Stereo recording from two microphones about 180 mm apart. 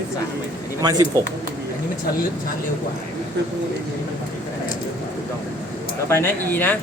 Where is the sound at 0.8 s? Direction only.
20° right (ahead or behind).